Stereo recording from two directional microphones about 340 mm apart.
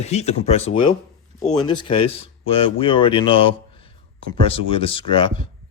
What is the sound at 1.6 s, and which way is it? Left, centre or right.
Speech, centre.